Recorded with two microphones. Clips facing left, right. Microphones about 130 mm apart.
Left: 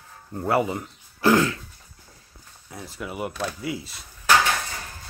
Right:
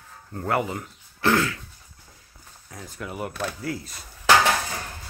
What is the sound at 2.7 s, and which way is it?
Speech, 5° left (ahead or behind).